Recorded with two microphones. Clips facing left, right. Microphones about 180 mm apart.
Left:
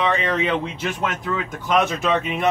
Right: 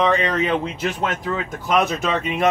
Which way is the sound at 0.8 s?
35° right (ahead or behind).